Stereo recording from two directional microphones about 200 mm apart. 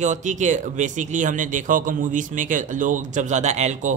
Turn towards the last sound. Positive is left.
turn(degrees=-35)  # may be behind; listen again after turning